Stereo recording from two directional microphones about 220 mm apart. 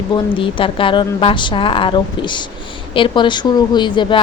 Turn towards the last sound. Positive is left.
turn(degrees=20)  # may be behind; listen again after turning